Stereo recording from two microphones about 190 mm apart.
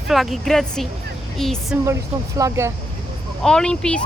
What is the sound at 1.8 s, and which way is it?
Speech, 15° right (ahead or behind).